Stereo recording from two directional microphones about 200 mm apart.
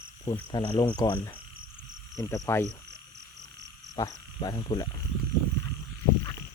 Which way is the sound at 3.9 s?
20° left (ahead or behind).